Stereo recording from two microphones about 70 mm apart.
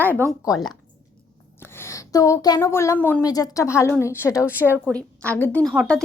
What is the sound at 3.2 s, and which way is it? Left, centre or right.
A woman's voice, left.